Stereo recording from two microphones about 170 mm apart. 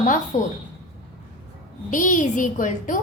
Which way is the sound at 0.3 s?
45° left (ahead or behind).